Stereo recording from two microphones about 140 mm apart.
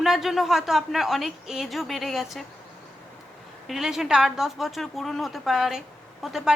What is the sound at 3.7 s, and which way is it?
A woman's voice, centre (ahead or behind).